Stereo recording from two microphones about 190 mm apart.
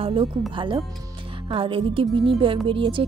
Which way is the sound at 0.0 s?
30° right (ahead or behind).